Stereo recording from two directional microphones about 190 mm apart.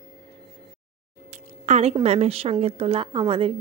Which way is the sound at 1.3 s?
35° right (ahead or behind).